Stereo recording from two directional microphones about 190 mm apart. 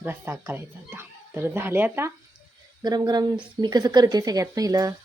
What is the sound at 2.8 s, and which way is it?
Speech, 20° right (ahead or behind).